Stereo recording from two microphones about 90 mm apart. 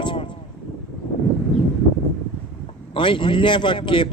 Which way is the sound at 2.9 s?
65° left (ahead or behind).